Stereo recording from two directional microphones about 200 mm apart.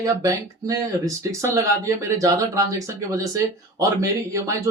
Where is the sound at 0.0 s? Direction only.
15° right (ahead or behind).